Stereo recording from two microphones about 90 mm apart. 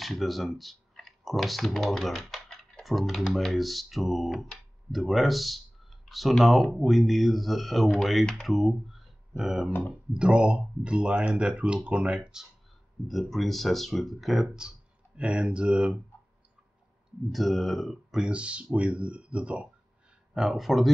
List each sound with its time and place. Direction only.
0.0 s speech: centre (ahead or behind)
9.7 s speech: 25° left (ahead or behind)
10.1 s speech: 10° right (ahead or behind)
17.3 s speech: centre (ahead or behind)
18.2 s speech: 10° right (ahead or behind)
20.3 s speech: 5° right (ahead or behind)